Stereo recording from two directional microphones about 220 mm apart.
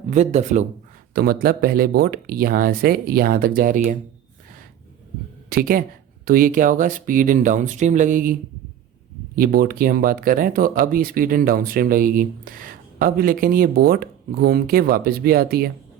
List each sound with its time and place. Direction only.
0.1 s speech: 30° right (ahead or behind)
1.1 s speech: 45° right (ahead or behind)
5.5 s speech: 40° right (ahead or behind)